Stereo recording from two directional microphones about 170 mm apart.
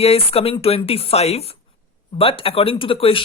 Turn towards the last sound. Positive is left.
turn(degrees=35)  # may be behind; listen again after turning